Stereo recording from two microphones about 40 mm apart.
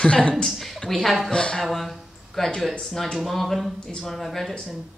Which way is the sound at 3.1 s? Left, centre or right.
Centre.